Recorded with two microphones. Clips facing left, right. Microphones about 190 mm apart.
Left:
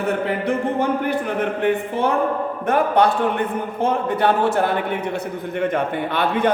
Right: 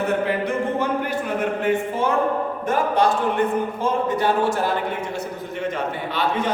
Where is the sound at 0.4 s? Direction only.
55° left (ahead or behind).